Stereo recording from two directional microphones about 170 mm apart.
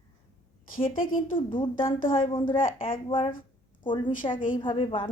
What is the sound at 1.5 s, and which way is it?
Speech, 30° left (ahead or behind).